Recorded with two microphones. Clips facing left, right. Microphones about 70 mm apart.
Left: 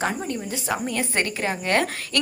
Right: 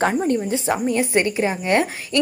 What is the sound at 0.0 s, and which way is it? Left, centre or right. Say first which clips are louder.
A woman's voice: right 7 dB; right.